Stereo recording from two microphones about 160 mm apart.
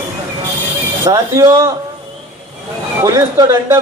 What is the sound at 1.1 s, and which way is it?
Speech, 20° right (ahead or behind).